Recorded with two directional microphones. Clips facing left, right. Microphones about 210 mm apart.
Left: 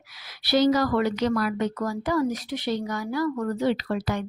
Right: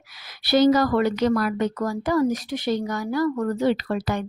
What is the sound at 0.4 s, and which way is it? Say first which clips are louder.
Speech: right 3 dB; 50° right (ahead or behind).